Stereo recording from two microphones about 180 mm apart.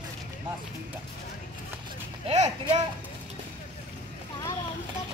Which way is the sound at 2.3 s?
40° right (ahead or behind).